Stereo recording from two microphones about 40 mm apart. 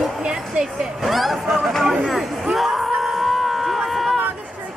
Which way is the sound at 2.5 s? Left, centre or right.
Centre.